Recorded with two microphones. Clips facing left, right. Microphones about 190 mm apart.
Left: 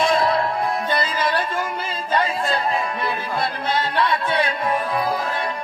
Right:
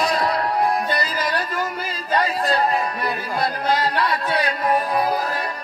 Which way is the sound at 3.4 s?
25° left (ahead or behind).